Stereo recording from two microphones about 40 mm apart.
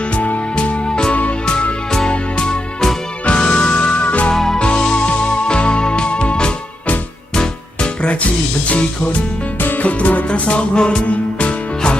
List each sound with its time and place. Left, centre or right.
0.5 s music: left
4.0 s music: left
4.3 s music: centre
9.6 s music: left
10.2 s music: left
10.8 s music: left